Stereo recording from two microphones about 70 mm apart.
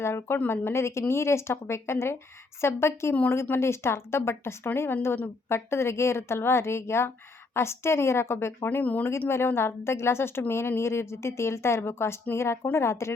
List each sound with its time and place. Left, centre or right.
0.0 s a woman's voice: left
9.0 s a woman's voice: left